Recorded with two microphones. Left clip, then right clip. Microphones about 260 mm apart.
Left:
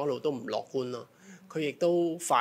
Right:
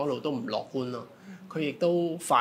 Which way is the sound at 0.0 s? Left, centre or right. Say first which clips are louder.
Right 1 dB; left.